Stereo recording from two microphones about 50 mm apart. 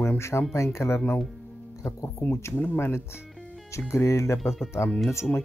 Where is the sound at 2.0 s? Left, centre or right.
Left.